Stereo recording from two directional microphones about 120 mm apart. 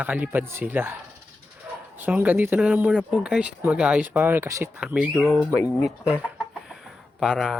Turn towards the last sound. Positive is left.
turn(degrees=0)  # may be behind; listen again after turning